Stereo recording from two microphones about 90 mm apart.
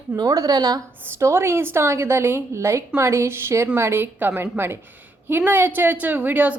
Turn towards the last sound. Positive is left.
turn(degrees=-20)  # may be behind; listen again after turning